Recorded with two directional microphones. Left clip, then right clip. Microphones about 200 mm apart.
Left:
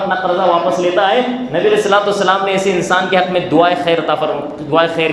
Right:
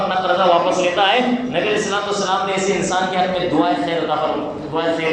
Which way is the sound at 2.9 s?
45° left (ahead or behind).